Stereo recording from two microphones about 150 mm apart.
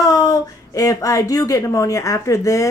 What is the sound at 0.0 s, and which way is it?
Speech, 25° left (ahead or behind).